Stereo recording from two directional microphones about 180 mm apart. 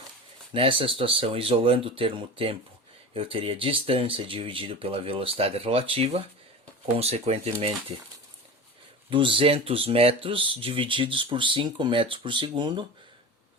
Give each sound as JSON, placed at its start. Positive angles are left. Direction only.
{"t": 0.5, "sound": "speech", "side_deg": -30}
{"t": 9.0, "sound": "speech", "side_deg": -30}